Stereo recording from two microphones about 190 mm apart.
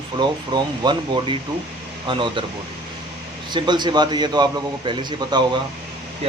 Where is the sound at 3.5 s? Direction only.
25° right (ahead or behind).